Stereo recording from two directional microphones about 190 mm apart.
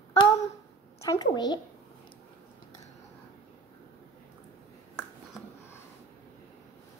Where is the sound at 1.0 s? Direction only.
20° left (ahead or behind).